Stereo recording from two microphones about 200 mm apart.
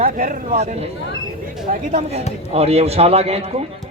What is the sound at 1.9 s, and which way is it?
A man's voice, 30° right (ahead or behind).